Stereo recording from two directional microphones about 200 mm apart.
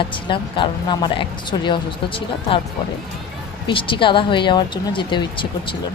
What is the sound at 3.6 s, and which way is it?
Speech, 25° left (ahead or behind).